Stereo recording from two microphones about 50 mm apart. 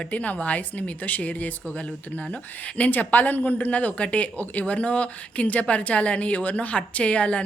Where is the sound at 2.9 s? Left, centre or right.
Left.